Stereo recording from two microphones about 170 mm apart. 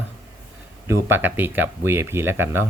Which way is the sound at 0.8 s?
15° right (ahead or behind).